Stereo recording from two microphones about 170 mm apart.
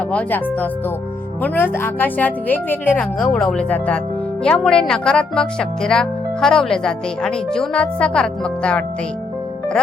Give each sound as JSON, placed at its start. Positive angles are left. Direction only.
{"t": 0.1, "sound": "speech", "side_deg": 10}